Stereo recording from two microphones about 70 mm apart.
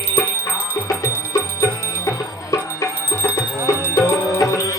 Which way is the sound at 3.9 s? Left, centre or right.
Left.